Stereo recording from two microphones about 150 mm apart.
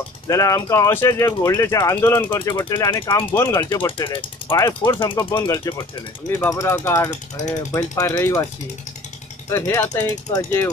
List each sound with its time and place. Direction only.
0.3 s speech: 20° left (ahead or behind)
2.3 s speech: 30° left (ahead or behind)
3.7 s speech: 30° left (ahead or behind)
4.6 s speech: 20° left (ahead or behind)
9.5 s speech: 20° left (ahead or behind)